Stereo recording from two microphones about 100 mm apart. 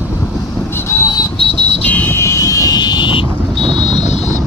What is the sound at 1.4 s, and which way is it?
Vehicle, 80° left.